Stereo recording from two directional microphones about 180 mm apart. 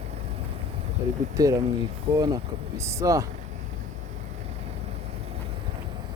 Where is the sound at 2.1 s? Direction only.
35° right (ahead or behind).